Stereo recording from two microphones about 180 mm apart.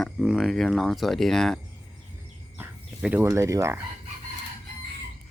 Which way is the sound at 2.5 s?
10° right (ahead or behind).